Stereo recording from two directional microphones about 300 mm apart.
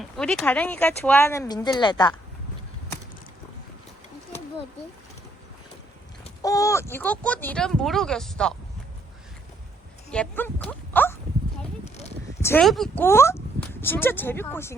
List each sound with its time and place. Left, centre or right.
0.0 s speech: centre
6.4 s speech: centre
10.1 s speech: centre
12.4 s speech: centre